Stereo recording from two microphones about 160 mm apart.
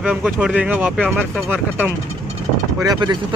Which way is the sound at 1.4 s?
10° right (ahead or behind).